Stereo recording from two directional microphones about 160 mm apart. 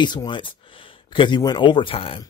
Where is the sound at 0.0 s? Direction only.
25° left (ahead or behind).